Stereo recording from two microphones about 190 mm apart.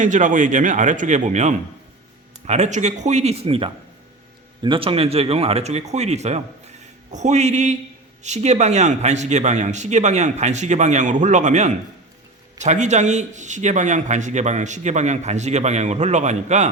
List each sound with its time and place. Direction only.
0.0 s speech: 40° right (ahead or behind)